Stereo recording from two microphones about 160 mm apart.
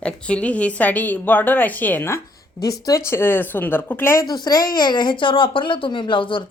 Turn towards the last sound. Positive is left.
turn(degrees=30)  # may be behind; listen again after turning